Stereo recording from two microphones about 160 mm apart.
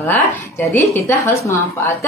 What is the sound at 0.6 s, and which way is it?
A woman's voice, 15° left (ahead or behind).